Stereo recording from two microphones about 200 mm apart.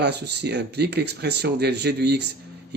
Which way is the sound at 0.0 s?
55° right (ahead or behind).